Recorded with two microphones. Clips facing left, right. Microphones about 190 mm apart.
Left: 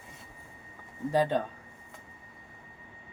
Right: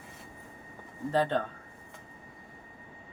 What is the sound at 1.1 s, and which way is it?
Speech, 10° left (ahead or behind).